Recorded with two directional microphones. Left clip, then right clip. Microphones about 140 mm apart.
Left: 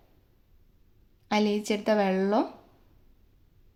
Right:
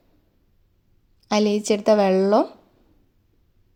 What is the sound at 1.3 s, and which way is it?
Speech, 40° right (ahead or behind).